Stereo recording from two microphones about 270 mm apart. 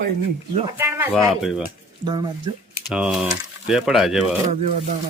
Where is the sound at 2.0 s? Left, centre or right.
Centre.